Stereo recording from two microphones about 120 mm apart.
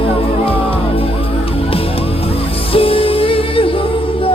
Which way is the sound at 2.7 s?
50° left (ahead or behind).